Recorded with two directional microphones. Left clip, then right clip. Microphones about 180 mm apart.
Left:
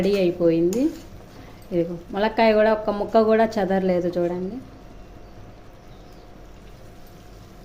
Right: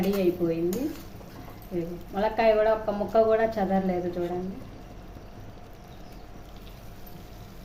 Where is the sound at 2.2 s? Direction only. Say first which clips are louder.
Left 4 dB; 60° left (ahead or behind).